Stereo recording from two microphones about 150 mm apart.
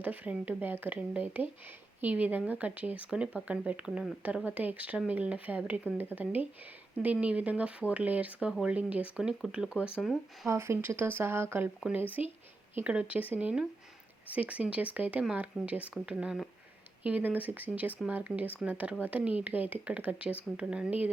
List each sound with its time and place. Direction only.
0.0 s speech: 10° right (ahead or behind)
10.5 s speech: 15° right (ahead or behind)